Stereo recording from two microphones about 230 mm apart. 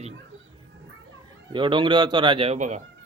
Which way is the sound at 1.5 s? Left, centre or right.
Right.